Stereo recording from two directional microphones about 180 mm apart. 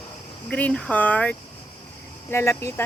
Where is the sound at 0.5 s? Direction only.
5° left (ahead or behind).